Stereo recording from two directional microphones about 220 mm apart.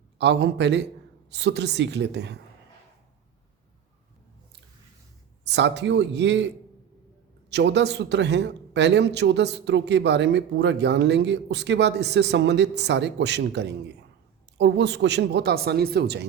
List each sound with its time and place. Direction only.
0.2 s a man's voice: 50° right (ahead or behind)
5.5 s a man's voice: 50° right (ahead or behind)
7.5 s a man's voice: 50° right (ahead or behind)